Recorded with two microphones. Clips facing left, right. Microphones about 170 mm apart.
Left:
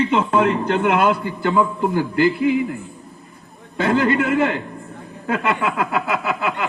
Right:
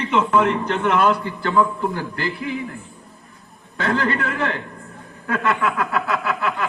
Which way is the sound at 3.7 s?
20° left (ahead or behind).